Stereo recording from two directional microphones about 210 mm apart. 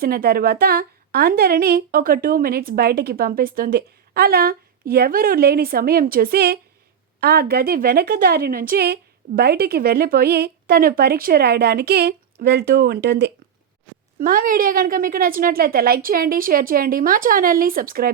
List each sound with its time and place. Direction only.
0.0 s a woman's voice: 45° right (ahead or behind)
14.2 s a woman's voice: 40° right (ahead or behind)